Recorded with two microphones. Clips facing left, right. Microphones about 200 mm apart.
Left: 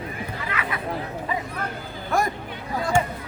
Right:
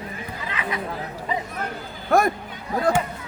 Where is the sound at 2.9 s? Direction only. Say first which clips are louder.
Even; 60° right (ahead or behind).